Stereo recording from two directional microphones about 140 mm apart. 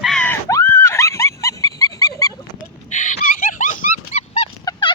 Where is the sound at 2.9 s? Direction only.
60° left (ahead or behind).